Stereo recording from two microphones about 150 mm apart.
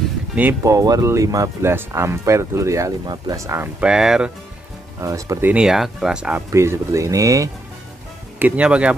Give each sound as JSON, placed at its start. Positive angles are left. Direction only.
{"t": 0.4, "sound": "speech", "side_deg": -15}
{"t": 3.8, "sound": "speech", "side_deg": -5}
{"t": 5.0, "sound": "speech", "side_deg": -20}
{"t": 5.5, "sound": "speech", "side_deg": -5}
{"t": 6.5, "sound": "speech", "side_deg": -20}
{"t": 8.4, "sound": "speech", "side_deg": -10}